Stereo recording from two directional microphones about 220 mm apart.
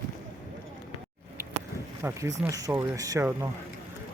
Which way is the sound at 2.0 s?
10° right (ahead or behind).